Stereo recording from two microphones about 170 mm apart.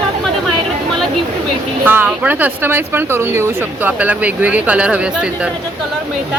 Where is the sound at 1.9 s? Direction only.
10° right (ahead or behind).